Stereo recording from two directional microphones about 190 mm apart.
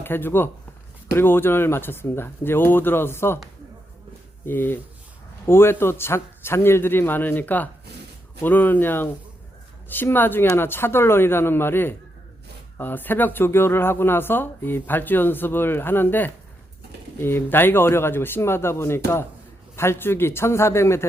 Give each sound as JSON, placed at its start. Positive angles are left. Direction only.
{"t": 0.0, "sound": "speech", "side_deg": 10}
{"t": 4.4, "sound": "speech", "side_deg": 10}